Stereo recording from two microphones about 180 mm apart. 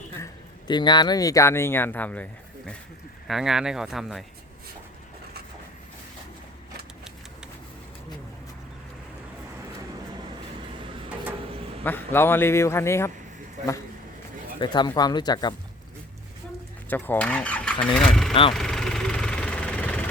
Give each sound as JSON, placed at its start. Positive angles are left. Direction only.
{"t": 0.7, "sound": "speech", "side_deg": 25}
{"t": 3.2, "sound": "speech", "side_deg": 0}
{"t": 11.8, "sound": "speech", "side_deg": 10}
{"t": 13.6, "sound": "speech", "side_deg": -45}
{"t": 14.6, "sound": "speech", "side_deg": 25}
{"t": 16.9, "sound": "speech", "side_deg": 10}
{"t": 18.5, "sound": "vehicle", "side_deg": 0}